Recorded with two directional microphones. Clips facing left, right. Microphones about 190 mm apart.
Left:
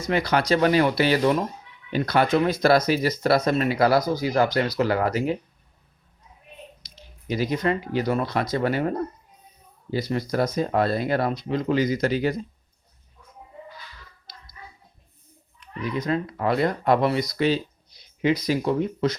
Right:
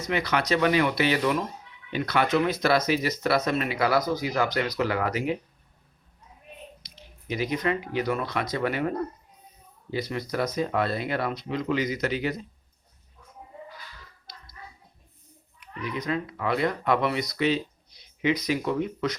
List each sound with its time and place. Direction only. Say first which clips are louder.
0.1 s speech: left 4 dB; 35° left (ahead or behind)
6.9 s speech: left 4 dB; 35° left (ahead or behind)
15.8 s speech: left 4 dB; 35° left (ahead or behind)